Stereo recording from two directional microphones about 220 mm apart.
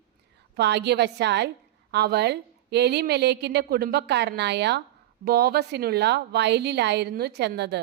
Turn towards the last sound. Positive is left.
turn(degrees=-50)  # may be behind; listen again after turning